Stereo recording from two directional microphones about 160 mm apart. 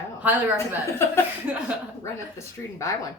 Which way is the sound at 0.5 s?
15° left (ahead or behind).